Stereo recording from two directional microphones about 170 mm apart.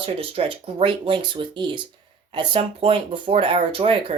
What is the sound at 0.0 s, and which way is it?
Speech, 35° right (ahead or behind).